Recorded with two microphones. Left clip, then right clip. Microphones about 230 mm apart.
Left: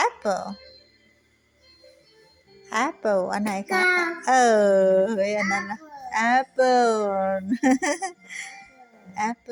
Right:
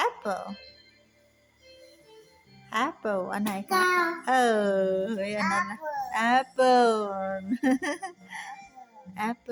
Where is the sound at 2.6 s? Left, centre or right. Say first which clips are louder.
Left 5 dB; centre.